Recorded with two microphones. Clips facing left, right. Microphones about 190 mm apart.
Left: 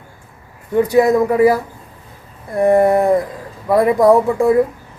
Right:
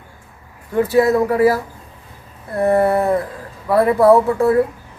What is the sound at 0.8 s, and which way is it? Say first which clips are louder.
Speech: left 2 dB; 15° left (ahead or behind).